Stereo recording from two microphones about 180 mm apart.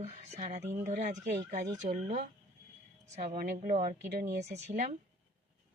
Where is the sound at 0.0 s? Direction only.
40° right (ahead or behind).